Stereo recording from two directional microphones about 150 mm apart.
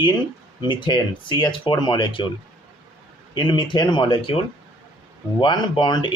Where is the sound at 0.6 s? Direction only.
30° left (ahead or behind).